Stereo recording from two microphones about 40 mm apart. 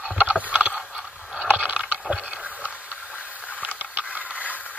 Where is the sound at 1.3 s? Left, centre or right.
Right.